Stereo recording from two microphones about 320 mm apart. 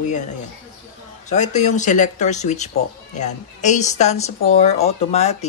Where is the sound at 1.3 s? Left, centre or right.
Left.